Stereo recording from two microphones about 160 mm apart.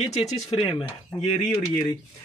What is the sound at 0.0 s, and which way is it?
Speech, 40° left (ahead or behind).